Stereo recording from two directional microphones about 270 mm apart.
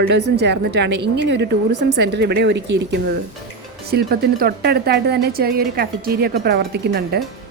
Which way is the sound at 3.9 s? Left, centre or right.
Right.